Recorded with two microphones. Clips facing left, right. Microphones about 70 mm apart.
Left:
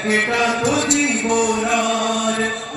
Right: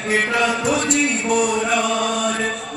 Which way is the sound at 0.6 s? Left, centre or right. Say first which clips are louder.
Left 1 dB; left.